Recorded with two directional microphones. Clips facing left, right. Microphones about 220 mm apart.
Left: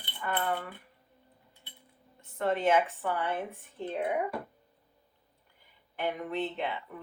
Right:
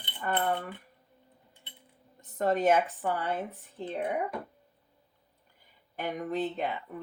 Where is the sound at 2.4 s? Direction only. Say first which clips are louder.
Right 2 dB; 40° right (ahead or behind).